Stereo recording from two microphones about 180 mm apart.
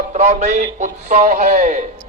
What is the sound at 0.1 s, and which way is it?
A man's voice, 40° right (ahead or behind).